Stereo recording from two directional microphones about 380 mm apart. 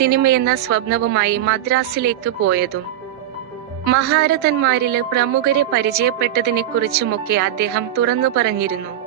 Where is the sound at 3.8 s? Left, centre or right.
Right.